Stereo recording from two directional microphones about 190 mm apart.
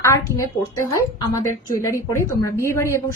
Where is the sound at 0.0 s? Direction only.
15° left (ahead or behind).